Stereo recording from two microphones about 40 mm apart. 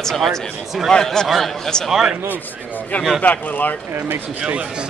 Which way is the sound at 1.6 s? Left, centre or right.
Centre.